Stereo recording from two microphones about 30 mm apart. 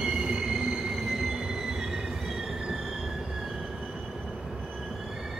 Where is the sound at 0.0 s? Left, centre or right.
Right.